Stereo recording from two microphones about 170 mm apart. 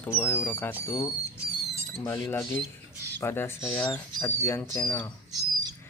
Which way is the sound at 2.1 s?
15° left (ahead or behind).